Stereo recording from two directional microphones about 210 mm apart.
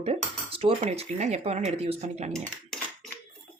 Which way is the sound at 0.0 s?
30° right (ahead or behind).